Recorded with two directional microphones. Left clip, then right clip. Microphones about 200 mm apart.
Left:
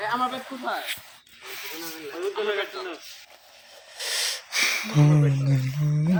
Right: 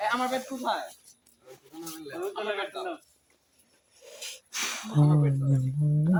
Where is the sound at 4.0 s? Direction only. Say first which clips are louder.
Left 15 dB; 10° left (ahead or behind).